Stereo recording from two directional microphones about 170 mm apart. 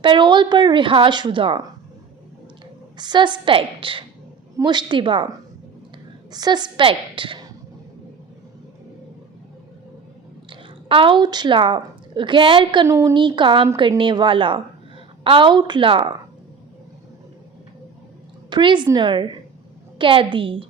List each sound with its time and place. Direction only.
0.0 s a woman's voice: 30° right (ahead or behind)
3.0 s a woman's voice: 25° right (ahead or behind)
6.3 s a woman's voice: 25° right (ahead or behind)
10.5 s a woman's voice: 30° right (ahead or behind)
18.5 s a woman's voice: 25° right (ahead or behind)